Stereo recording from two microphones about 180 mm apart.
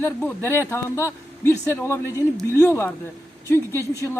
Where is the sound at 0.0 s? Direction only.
10° left (ahead or behind).